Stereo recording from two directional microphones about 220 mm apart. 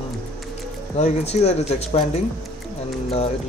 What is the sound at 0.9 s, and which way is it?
Speech, 30° left (ahead or behind).